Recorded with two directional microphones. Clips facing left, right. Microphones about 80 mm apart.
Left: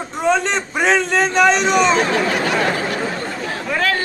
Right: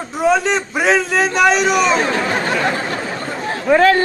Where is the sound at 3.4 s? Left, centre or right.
Right.